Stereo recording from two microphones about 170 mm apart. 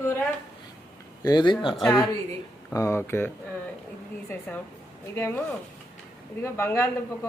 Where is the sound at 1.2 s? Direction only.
25° left (ahead or behind).